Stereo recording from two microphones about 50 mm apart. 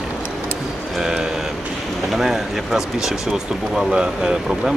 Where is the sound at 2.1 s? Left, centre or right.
Centre.